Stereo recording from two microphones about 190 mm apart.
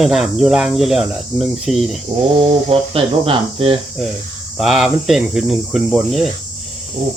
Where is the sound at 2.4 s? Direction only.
30° right (ahead or behind).